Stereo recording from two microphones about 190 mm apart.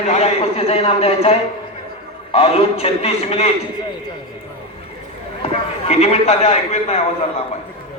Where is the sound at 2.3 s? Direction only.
30° left (ahead or behind).